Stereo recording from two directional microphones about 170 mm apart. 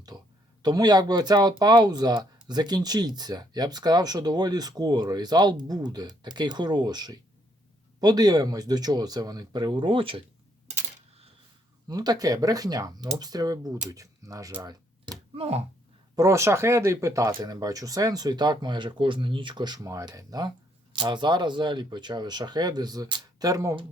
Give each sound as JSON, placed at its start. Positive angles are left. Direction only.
{"t": 0.1, "sound": "a sound", "side_deg": -20}
{"t": 0.6, "sound": "speech", "side_deg": -25}
{"t": 11.9, "sound": "speech", "side_deg": -25}
{"t": 15.4, "sound": "speech", "side_deg": -35}
{"t": 16.1, "sound": "speech", "side_deg": -20}